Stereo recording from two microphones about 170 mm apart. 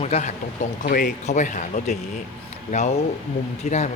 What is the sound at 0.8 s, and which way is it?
Speech, 60° left (ahead or behind).